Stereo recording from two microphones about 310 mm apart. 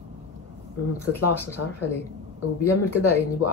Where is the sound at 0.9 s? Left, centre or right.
Left.